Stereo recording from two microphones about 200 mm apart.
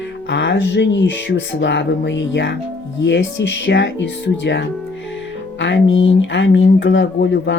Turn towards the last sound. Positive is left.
turn(degrees=60)  # may be behind; listen again after turning